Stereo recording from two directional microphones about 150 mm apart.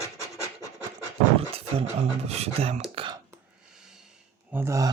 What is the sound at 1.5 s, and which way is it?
Speech, 40° right (ahead or behind).